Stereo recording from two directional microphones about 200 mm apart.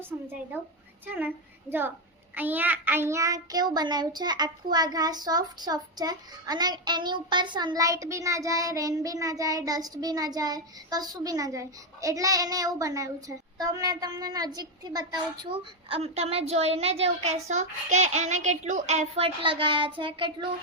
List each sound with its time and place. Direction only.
1.0 s a woman's voice: 10° right (ahead or behind)
2.3 s child singing: 10° right (ahead or behind); by 15.6 s 25° right (ahead or behind)
15.9 s a woman's voice: 30° right (ahead or behind)